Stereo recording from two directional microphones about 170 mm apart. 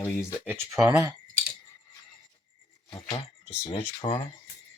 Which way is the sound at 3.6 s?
30° left (ahead or behind).